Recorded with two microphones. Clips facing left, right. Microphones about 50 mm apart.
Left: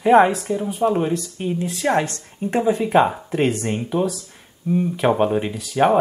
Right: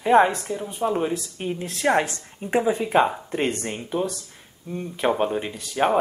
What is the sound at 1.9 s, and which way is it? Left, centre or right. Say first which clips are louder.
Speech: left 2 dB; centre.